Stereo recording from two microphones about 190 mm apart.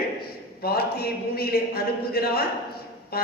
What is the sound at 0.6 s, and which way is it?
A man's voice, 55° left (ahead or behind).